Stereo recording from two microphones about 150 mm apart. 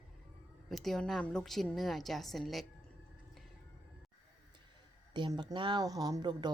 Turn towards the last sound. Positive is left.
turn(degrees=-25)  # may be behind; listen again after turning